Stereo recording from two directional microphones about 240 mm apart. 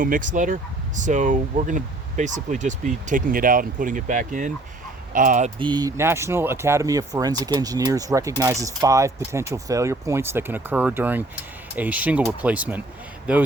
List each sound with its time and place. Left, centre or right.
0.0 s speech: right
5.5 s speech: centre